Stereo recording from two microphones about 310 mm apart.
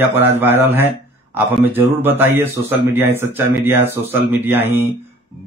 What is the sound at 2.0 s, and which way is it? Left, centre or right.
A man's voice, centre.